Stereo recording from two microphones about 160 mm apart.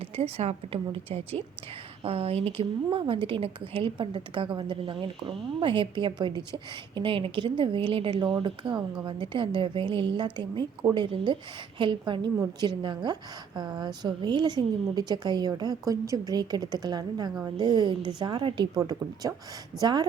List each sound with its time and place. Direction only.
0.2 s a woman's voice: 40° right (ahead or behind)